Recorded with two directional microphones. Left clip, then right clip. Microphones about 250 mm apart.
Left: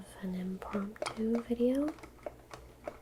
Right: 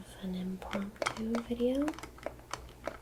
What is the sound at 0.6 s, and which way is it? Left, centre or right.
Speech, left.